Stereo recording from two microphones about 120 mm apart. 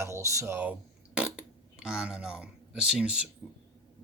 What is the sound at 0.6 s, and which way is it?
Speech, 10° right (ahead or behind).